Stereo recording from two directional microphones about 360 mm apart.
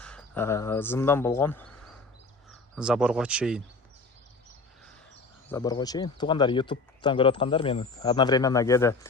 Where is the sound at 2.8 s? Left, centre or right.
Centre.